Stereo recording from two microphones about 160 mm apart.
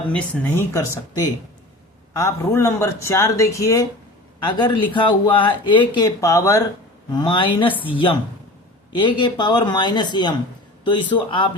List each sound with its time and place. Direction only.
0.1 s speech: 15° left (ahead or behind)
7.1 s a man's voice: 30° left (ahead or behind)